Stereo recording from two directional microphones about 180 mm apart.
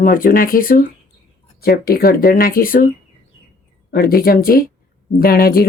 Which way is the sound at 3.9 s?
55° left (ahead or behind).